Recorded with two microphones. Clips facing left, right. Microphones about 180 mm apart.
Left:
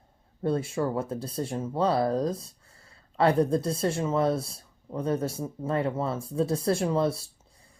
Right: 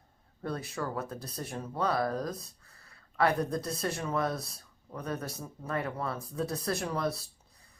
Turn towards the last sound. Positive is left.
turn(degrees=25)  # may be behind; listen again after turning